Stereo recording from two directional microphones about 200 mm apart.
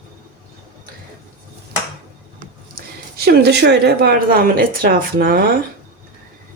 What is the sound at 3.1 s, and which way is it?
A woman's voice, 55° right (ahead or behind).